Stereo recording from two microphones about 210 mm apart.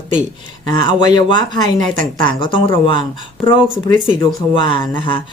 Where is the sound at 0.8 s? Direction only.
25° left (ahead or behind).